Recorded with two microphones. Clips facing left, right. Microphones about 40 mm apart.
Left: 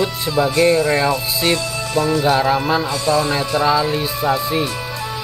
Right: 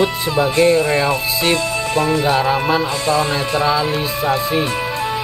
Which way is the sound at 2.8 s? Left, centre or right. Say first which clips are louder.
Even; right.